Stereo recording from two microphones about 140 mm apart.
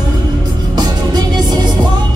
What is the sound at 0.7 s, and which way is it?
Music, 30° right (ahead or behind).